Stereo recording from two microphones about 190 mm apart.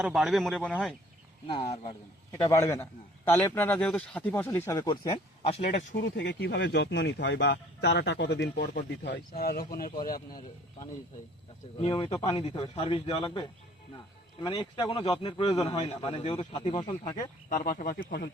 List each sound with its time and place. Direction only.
0.0 s speech: centre (ahead or behind)
1.5 s a man's voice: 30° left (ahead or behind)
2.3 s a man's voice: 15° left (ahead or behind); by 6.0 s 35° left (ahead or behind)
6.0 s speech: 65° left (ahead or behind); by 10.2 s 50° left (ahead or behind)
10.2 s a man's voice: 20° left (ahead or behind)
14.4 s a man's voice: 25° left (ahead or behind)
17.5 s speech: 45° left (ahead or behind)